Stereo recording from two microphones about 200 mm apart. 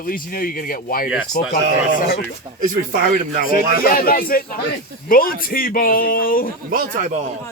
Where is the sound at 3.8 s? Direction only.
45° left (ahead or behind).